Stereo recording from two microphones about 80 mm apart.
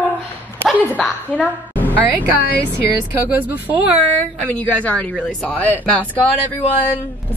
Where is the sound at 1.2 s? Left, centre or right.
Left.